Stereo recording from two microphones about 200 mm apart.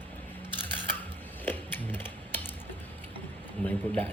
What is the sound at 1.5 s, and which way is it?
Sewing machine, 10° left (ahead or behind).